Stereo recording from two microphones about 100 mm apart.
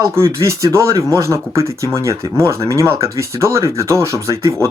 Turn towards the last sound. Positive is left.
turn(degrees=-30)  # may be behind; listen again after turning